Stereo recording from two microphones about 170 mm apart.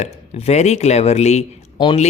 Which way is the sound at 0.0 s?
40° left (ahead or behind).